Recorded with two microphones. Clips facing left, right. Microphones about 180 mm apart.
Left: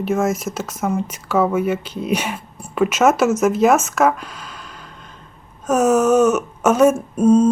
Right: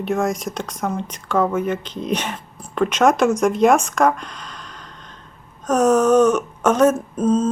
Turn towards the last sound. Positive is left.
turn(degrees=10)  # may be behind; listen again after turning